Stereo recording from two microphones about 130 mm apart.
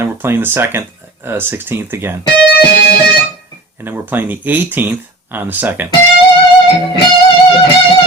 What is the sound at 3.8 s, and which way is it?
Speech, 15° right (ahead or behind).